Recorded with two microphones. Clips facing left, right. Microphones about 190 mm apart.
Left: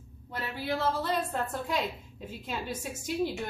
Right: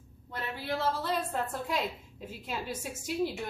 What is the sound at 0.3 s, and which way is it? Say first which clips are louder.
A woman's voice: left 2 dB; 5° left (ahead or behind).